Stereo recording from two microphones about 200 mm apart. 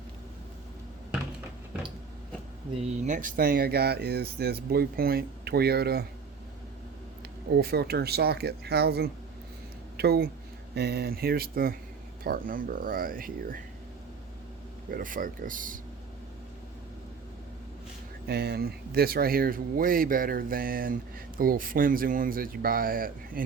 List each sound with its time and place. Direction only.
3.0 s speech: 40° right (ahead or behind)
7.5 s speech: 55° right (ahead or behind)
14.8 s speech: 45° right (ahead or behind)
18.3 s speech: 55° right (ahead or behind)